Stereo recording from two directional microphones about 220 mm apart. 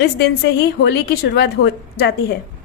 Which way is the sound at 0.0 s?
50° left (ahead or behind).